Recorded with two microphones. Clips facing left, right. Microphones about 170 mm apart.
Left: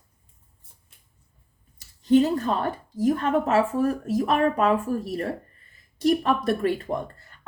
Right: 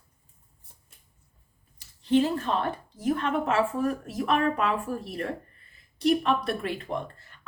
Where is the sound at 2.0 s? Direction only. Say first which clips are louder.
Left 4 dB; 40° left (ahead or behind).